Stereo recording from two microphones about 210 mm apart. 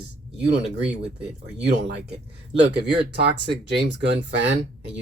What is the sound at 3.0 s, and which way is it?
Speech, 55° right (ahead or behind).